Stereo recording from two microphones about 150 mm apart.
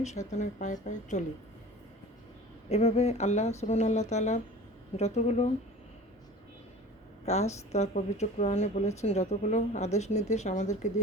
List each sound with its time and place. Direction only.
0.0 s speech: 50° left (ahead or behind)
2.6 s speech: 45° left (ahead or behind)
7.3 s speech: 45° left (ahead or behind)